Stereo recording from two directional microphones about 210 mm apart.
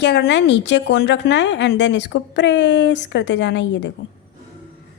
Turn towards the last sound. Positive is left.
turn(degrees=60)  # may be behind; listen again after turning